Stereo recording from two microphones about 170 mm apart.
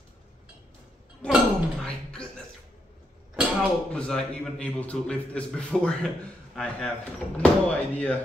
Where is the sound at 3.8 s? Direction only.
5° left (ahead or behind).